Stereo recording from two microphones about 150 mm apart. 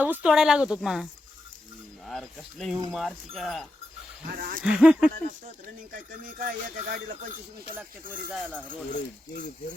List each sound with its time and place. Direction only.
0.0 s speech: 10° right (ahead or behind)
2.0 s speech: centre (ahead or behind)
4.4 s speech: 75° right (ahead or behind)
4.6 s speech: 5° right (ahead or behind)
5.9 s speech: 65° right (ahead or behind)
8.3 s speech: 5° left (ahead or behind)